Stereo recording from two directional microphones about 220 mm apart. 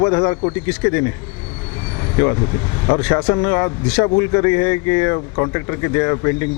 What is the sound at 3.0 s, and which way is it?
A man's voice, 15° left (ahead or behind).